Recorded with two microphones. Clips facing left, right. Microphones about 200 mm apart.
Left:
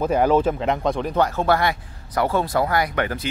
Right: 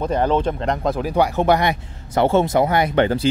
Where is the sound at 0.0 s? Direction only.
10° left (ahead or behind).